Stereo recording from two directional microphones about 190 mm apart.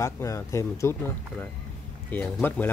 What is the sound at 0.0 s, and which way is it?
Speech, 15° left (ahead or behind).